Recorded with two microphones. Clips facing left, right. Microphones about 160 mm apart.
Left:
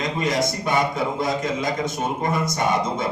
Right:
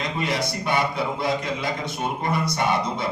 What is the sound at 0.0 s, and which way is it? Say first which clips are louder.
A man's voice: left 3 dB; 45° left (ahead or behind).